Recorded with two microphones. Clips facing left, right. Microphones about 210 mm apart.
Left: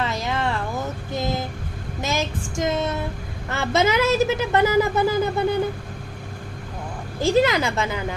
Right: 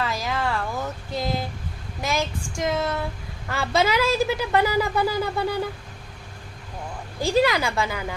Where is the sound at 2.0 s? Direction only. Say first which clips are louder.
Left 1 dB; 25° left (ahead or behind).